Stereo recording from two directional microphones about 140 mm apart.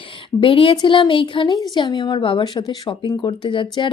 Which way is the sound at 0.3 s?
40° left (ahead or behind).